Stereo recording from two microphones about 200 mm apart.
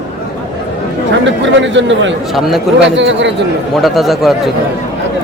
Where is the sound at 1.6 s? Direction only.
65° right (ahead or behind).